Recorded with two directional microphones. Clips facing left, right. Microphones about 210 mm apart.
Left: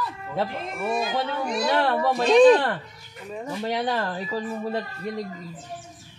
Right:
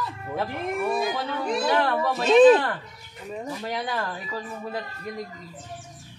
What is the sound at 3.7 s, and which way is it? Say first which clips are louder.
Speech: left 5 dB; 25° left (ahead or behind).